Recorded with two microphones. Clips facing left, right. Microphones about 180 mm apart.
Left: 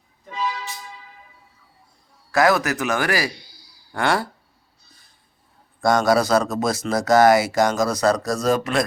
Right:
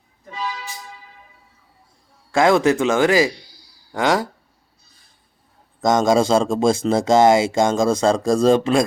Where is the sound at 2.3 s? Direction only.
25° right (ahead or behind).